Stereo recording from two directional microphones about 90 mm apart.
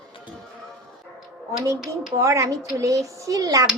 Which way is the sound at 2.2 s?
35° right (ahead or behind).